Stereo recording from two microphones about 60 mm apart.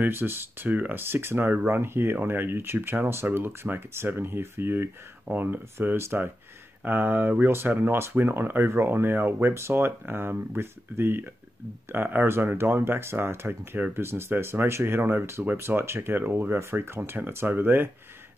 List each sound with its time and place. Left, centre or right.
0.0 s speech: right
6.8 s speech: right